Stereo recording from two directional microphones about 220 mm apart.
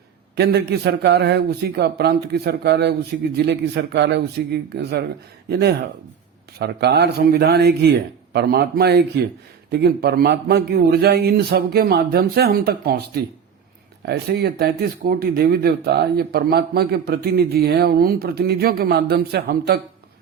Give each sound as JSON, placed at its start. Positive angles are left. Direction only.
{"t": 0.3, "sound": "speech", "side_deg": -50}
{"t": 14.0, "sound": "speech", "side_deg": -50}